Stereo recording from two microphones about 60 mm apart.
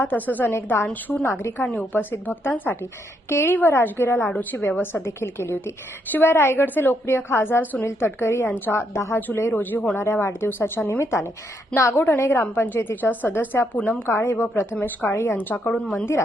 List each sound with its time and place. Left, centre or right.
0.0 s a woman's voice: left
0.5 s a woman's voice: left
1.5 s a woman's voice: left
7.9 s a woman's voice: left
8.5 s a woman's voice: left
8.8 s a woman's voice: left
10.0 s a woman's voice: left
14.1 s a woman's voice: left
14.6 s a woman's voice: left